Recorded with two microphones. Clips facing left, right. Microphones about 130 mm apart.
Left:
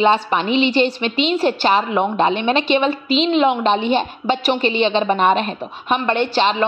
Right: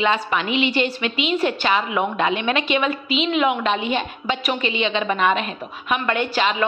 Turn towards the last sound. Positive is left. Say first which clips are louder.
# left 4 dB
turn(degrees=30)  # may be behind; listen again after turning